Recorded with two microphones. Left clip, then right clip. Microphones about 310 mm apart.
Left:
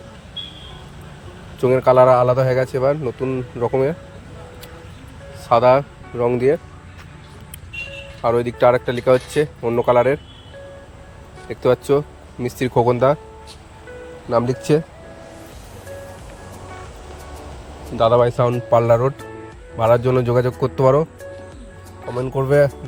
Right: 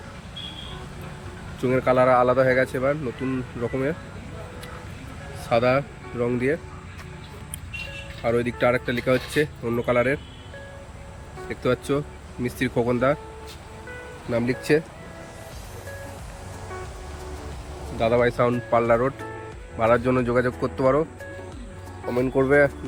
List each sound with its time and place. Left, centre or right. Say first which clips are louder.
1.6 s speech: left 7 dB; centre
5.5 s speech: left 7 dB; centre
8.2 s speech: left 7 dB; centre
11.4 s speech: left 7 dB; centre
14.7 s speech: left 3 dB; left
18.0 s speech: left 6 dB; left
22.1 s speech: left 2 dB; left